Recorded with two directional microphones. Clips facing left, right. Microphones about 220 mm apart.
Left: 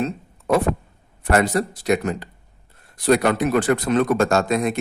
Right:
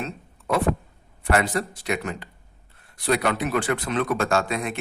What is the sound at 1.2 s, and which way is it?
A man's voice, 40° left (ahead or behind).